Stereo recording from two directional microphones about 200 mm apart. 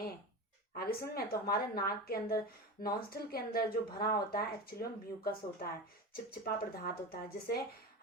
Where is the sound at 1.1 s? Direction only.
50° left (ahead or behind).